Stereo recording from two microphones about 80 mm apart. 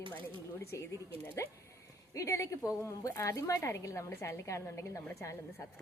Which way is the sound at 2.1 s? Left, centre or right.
Left.